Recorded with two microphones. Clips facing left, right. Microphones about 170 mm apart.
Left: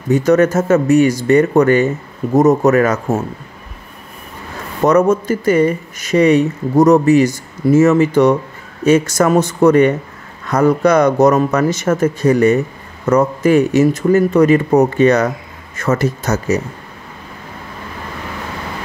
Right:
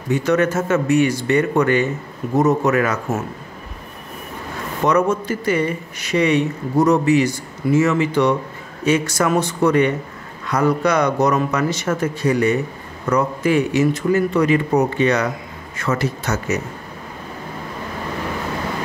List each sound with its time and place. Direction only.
0.1 s speech: 40° left (ahead or behind)
4.8 s speech: 45° left (ahead or behind)